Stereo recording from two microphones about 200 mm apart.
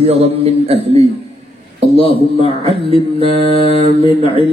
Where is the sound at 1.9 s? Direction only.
30° left (ahead or behind).